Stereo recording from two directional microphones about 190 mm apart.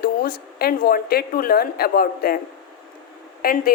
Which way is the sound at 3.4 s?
50° left (ahead or behind).